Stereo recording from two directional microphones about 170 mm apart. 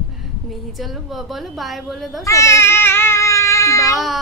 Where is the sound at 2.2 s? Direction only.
15° left (ahead or behind).